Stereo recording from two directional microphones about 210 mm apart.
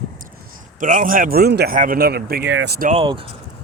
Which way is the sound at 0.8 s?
40° right (ahead or behind).